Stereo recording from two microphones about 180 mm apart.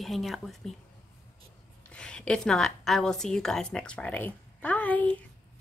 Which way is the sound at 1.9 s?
5° left (ahead or behind).